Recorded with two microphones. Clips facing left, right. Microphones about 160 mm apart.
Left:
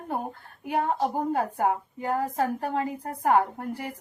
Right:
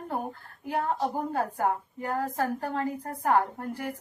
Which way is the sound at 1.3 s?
20° left (ahead or behind).